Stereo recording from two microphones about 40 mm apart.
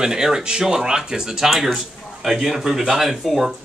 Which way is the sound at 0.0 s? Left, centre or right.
Centre.